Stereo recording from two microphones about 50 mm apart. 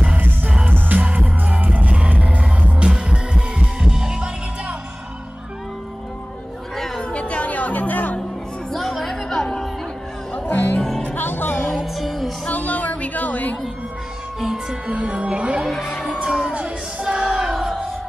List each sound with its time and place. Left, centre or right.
1.0 s music: right
3.1 s heart sounds: centre
7.0 s music: left
8.7 s music: centre
10.5 s music: left
10.8 s music: centre
11.1 s music: left
11.7 s music: centre
12.4 s music: left
14.4 s music: centre
14.9 s music: right